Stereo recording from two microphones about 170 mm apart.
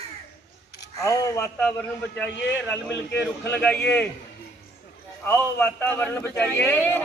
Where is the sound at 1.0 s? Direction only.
15° left (ahead or behind).